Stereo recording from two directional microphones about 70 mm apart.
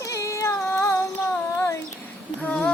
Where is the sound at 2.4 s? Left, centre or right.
Centre.